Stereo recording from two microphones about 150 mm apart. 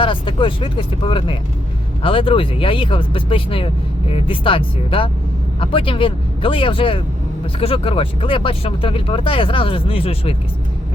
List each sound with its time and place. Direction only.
0.0 s speech: 35° left (ahead or behind)